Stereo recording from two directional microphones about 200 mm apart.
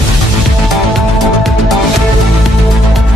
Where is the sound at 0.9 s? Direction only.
Centre (ahead or behind).